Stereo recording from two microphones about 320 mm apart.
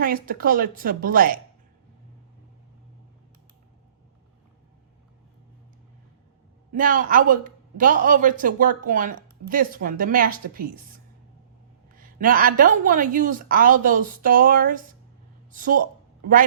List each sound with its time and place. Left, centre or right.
0.0 s a woman's voice: right
6.7 s a woman's voice: right
11.9 s a woman's voice: right